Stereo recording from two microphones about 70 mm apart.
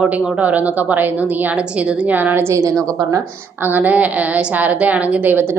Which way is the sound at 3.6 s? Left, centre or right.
Right.